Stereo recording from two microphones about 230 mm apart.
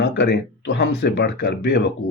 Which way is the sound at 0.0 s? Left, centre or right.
Left.